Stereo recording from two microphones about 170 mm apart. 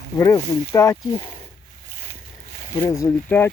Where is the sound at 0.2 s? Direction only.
20° left (ahead or behind).